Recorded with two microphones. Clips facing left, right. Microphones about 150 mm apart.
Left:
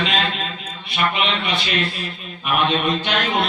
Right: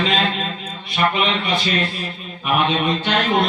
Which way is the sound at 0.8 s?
40° right (ahead or behind).